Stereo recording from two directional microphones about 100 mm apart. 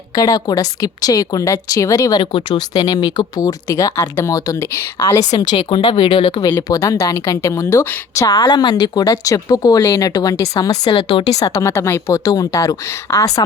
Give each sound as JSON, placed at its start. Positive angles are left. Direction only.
{"t": 0.2, "sound": "a woman's voice", "side_deg": 40}
{"t": 6.4, "sound": "speech", "side_deg": 40}
{"t": 10.9, "sound": "speech", "side_deg": 55}
{"t": 11.3, "sound": "speech", "side_deg": 35}